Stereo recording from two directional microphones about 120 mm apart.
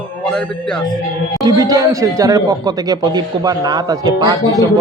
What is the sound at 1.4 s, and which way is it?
Speech, 30° right (ahead or behind).